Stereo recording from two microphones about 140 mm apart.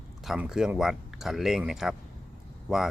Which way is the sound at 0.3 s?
5° right (ahead or behind).